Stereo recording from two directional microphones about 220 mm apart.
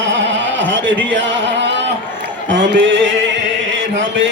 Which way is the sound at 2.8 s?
60° right (ahead or behind).